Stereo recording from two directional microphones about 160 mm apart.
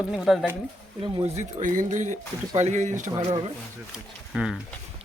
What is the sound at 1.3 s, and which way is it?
Speech, 55° right (ahead or behind).